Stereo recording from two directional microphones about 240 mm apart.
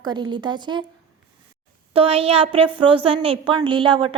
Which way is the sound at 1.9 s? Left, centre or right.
Right.